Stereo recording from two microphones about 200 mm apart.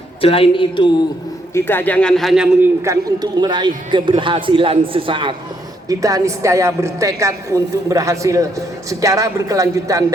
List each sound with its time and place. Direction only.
0.2 s a woman's voice: 30° left (ahead or behind)
1.5 s a man's voice: 10° left (ahead or behind)
2.8 s a man's voice: 15° right (ahead or behind)